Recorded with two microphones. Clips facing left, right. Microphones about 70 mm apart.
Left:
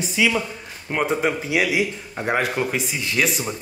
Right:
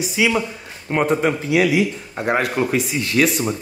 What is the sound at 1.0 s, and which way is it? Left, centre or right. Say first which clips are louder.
Speech: right 3 dB; centre.